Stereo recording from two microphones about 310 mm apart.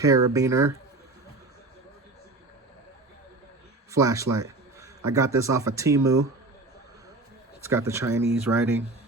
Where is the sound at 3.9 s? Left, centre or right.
Centre.